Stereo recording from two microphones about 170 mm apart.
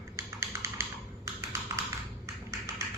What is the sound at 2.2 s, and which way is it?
Tap, 15° right (ahead or behind).